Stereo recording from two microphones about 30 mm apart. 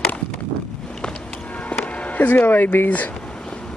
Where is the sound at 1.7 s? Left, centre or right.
Left.